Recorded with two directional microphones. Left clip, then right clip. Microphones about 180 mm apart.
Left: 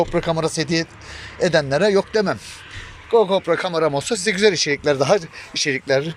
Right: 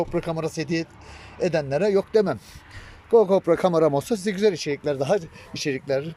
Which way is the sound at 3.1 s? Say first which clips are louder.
Left 1 dB; 35° right (ahead or behind).